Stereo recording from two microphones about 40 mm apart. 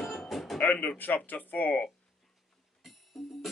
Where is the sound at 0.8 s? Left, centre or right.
Left.